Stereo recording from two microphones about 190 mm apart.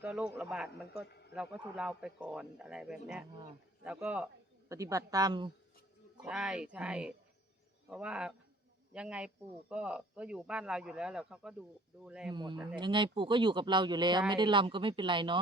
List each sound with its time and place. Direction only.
0.0 s a man's voice: 5° right (ahead or behind)
4.7 s speech: 15° right (ahead or behind)
6.2 s speech: centre (ahead or behind)
12.3 s speech: 25° right (ahead or behind)